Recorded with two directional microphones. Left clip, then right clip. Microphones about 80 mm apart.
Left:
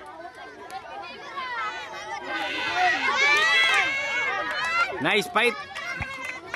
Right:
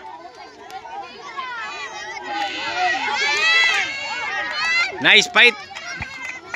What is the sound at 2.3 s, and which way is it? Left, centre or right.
Run, left.